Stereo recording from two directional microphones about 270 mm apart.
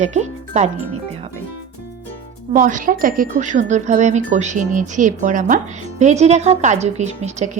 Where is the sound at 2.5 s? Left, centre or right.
Right.